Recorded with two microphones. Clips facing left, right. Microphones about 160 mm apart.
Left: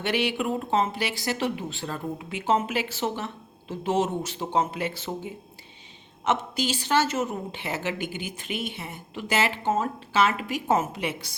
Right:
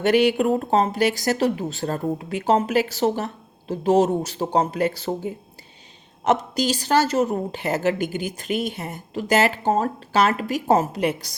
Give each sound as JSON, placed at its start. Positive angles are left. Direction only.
{"t": 0.0, "sound": "speech", "side_deg": -45}